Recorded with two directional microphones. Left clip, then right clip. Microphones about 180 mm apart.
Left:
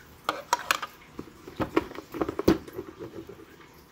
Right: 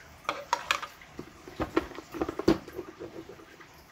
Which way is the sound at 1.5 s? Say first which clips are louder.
Left 3 dB; 25° left (ahead or behind).